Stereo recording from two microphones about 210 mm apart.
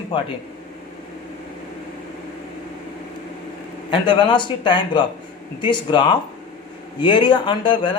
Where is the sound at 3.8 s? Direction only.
20° left (ahead or behind).